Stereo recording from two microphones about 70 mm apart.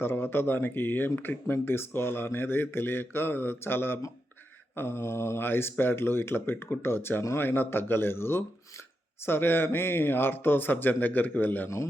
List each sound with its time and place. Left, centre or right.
0.0 s speech: left